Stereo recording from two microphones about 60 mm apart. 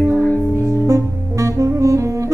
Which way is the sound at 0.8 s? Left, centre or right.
Right.